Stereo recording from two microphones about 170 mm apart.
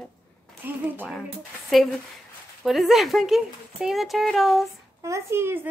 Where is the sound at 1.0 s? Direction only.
Centre (ahead or behind).